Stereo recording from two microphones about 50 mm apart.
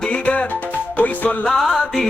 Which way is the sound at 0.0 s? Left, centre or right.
Left.